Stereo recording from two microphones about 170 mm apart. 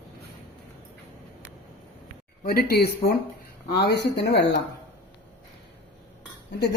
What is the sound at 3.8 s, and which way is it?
Speech, 80° left.